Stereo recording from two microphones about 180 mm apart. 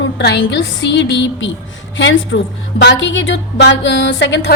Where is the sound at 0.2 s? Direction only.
75° left (ahead or behind).